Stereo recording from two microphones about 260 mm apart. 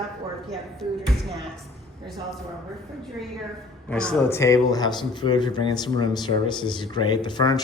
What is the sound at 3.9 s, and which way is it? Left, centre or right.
Speech, centre.